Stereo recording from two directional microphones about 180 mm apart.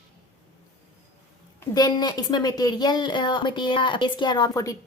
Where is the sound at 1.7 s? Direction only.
20° left (ahead or behind).